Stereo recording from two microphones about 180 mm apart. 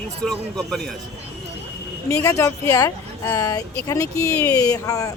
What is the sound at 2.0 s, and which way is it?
Speech, 15° left (ahead or behind).